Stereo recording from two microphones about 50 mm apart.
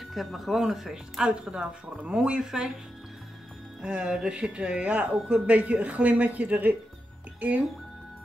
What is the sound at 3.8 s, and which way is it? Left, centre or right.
Speech, centre.